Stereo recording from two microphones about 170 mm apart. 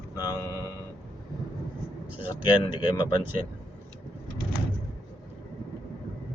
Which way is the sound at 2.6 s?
25° left (ahead or behind).